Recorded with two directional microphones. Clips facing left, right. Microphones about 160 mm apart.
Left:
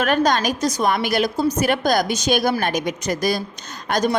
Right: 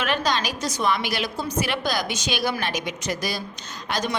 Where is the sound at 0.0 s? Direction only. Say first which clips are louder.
Left 6 dB; 45° left (ahead or behind).